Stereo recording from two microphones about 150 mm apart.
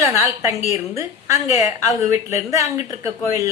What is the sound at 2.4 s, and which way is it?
A woman's voice, 20° right (ahead or behind).